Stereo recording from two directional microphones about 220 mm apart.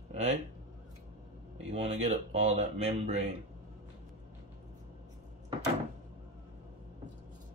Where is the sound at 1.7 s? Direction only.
25° right (ahead or behind).